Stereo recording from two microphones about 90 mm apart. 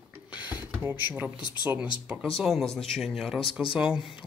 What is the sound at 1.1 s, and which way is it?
Speech, 15° right (ahead or behind).